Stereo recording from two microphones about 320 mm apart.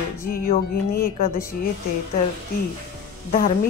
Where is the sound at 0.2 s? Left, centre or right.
Left.